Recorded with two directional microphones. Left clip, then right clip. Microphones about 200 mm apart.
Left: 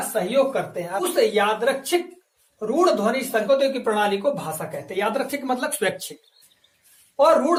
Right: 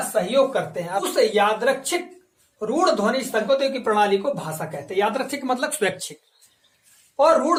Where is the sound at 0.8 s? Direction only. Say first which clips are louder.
Even; 35° right (ahead or behind).